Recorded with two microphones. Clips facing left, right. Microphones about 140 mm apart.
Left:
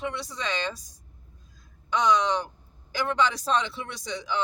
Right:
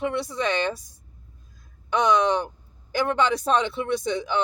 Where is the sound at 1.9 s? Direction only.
55° right (ahead or behind).